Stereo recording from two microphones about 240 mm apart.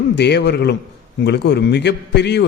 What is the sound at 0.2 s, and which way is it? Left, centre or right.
A man's voice, left.